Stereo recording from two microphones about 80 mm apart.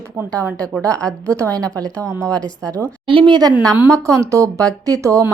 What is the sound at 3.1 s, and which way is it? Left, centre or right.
Speech, right.